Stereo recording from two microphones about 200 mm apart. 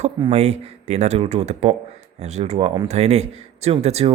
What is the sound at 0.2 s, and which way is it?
Speech, 30° right (ahead or behind).